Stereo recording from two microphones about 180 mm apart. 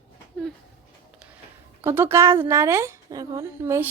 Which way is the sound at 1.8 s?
15° right (ahead or behind).